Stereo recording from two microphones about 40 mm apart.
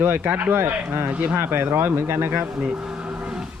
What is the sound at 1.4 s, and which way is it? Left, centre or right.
Speech, right.